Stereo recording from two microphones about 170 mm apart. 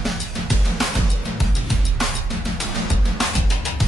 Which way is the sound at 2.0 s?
Centre (ahead or behind).